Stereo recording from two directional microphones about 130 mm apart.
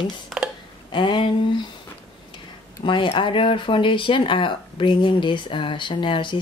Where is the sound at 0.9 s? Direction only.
40° left (ahead or behind).